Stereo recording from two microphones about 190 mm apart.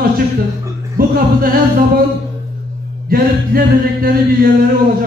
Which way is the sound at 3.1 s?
50° right (ahead or behind).